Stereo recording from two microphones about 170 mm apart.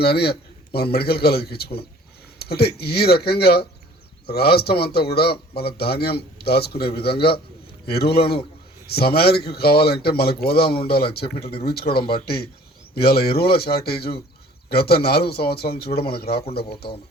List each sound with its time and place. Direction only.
0.0 s a man's voice: 70° left (ahead or behind)